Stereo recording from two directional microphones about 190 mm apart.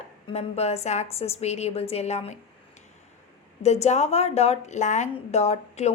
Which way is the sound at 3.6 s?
35° left (ahead or behind).